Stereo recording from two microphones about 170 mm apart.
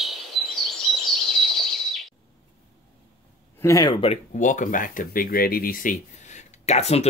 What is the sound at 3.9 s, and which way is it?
Speech, 35° left (ahead or behind).